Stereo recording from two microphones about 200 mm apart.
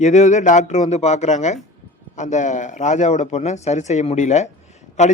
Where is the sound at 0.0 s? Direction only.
35° left (ahead or behind).